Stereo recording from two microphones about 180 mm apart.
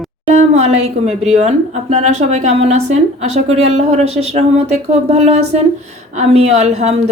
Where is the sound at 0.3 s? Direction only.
35° right (ahead or behind).